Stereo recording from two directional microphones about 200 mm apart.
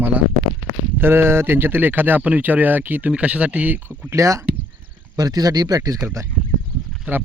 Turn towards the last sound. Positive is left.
turn(degrees=-5)  # may be behind; listen again after turning